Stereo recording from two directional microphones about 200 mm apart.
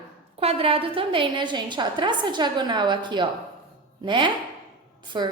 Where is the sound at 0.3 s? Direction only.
30° right (ahead or behind).